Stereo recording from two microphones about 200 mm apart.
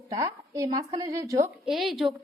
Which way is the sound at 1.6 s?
Centre (ahead or behind).